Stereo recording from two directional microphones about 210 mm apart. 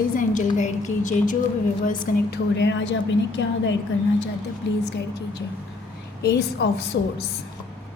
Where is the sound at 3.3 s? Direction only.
60° left (ahead or behind).